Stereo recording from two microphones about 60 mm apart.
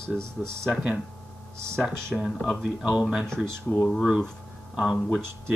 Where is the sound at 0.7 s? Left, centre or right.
Centre.